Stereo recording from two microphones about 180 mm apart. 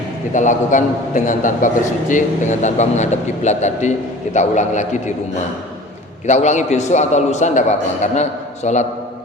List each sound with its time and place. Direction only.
0.3 s a man's voice: 45° left (ahead or behind)
6.2 s a man's voice: 40° left (ahead or behind)